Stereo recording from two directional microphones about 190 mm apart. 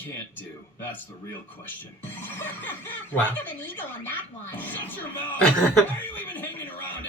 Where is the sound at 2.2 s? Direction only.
10° left (ahead or behind).